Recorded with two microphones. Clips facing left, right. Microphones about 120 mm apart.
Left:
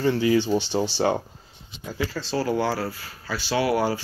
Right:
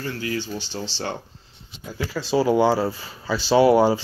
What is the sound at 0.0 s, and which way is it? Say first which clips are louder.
Speech: left 8 dB; 20° left (ahead or behind).